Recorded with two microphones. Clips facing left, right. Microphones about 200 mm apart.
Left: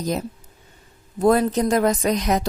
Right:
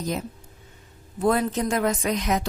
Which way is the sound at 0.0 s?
40° left (ahead or behind).